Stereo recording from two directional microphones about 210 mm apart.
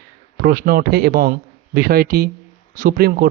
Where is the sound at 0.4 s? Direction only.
45° right (ahead or behind).